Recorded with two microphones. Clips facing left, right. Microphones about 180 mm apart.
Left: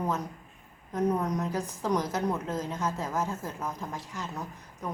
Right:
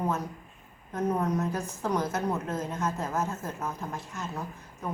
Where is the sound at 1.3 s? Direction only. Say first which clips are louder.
Right 1 dB; 10° left (ahead or behind).